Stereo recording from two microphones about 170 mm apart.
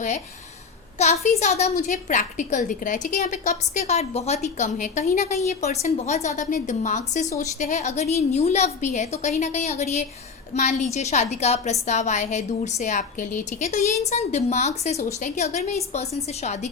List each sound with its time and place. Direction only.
0.9 s a woman's voice: 40° left (ahead or behind)